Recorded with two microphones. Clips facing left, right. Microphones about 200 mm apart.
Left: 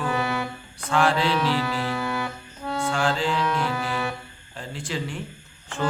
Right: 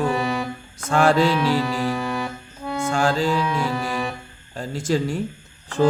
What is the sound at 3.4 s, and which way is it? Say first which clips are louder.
Music: right 2 dB; 10° right (ahead or behind).